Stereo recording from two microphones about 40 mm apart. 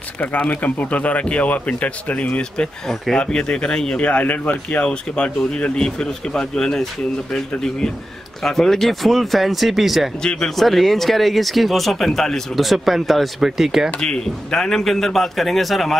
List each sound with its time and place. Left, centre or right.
0.5 s a man's voice: left; by 4.0 s centre
4.5 s a man's voice: left; by 13.8 s centre
13.9 s a man's voice: left; by 16.0 s centre